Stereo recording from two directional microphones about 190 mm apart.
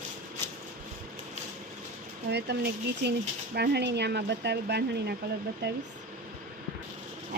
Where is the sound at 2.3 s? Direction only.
60° right (ahead or behind).